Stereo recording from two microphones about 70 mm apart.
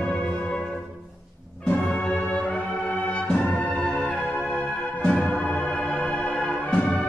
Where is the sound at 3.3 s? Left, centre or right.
Left.